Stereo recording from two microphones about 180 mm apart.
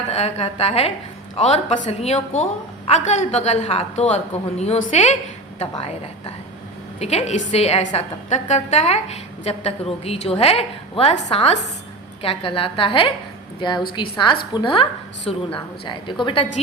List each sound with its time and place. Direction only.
0.1 s a woman's voice: 35° left (ahead or behind)
7.0 s a woman's voice: 35° left (ahead or behind)